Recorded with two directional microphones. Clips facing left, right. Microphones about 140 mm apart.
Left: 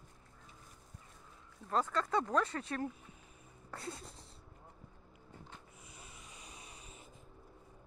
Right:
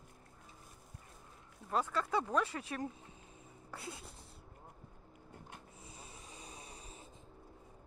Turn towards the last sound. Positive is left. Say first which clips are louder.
# right 2 dB
turn(degrees=-30)  # may be behind; listen again after turning